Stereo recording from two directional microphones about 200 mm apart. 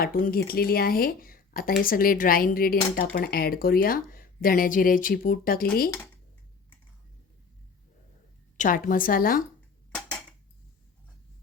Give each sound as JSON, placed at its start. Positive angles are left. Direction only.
{"t": 0.0, "sound": "speech", "side_deg": 45}
{"t": 8.5, "sound": "speech", "side_deg": 40}